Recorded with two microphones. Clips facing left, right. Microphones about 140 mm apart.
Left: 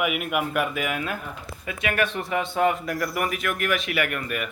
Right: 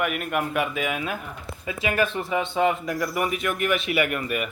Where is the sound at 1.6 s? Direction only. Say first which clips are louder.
Right 1 dB; 25° right (ahead or behind).